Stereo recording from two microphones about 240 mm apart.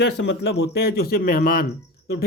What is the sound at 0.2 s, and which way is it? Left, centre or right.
A man's voice, left.